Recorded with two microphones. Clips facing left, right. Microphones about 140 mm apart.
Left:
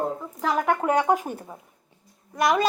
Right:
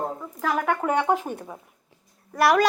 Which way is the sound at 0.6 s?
10° left (ahead or behind).